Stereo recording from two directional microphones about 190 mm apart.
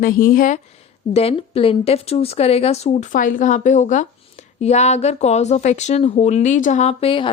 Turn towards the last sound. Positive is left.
turn(degrees=30)  # may be behind; listen again after turning